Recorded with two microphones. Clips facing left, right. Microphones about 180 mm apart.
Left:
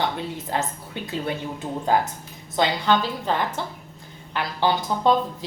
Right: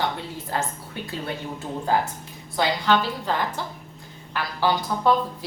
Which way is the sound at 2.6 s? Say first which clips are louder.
Left 1 dB; 20° left (ahead or behind).